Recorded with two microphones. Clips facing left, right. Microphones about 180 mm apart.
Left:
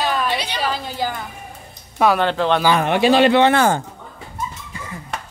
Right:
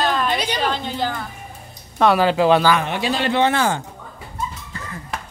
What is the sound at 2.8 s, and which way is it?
Speech, 65° left (ahead or behind).